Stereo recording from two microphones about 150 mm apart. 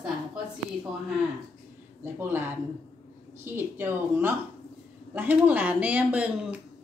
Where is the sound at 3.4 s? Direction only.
15° right (ahead or behind).